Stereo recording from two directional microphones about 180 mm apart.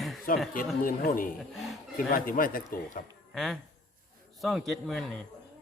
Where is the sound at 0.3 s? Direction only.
50° left (ahead or behind).